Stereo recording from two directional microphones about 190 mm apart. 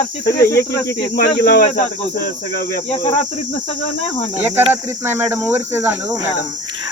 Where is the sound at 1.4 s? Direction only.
45° left (ahead or behind).